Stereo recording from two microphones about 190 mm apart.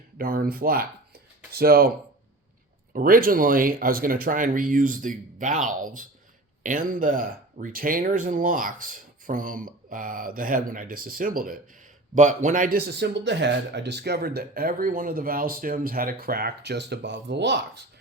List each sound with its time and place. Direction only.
0.2 s speech: 50° right (ahead or behind)
2.9 s speech: 45° right (ahead or behind); by 17.8 s 65° right (ahead or behind)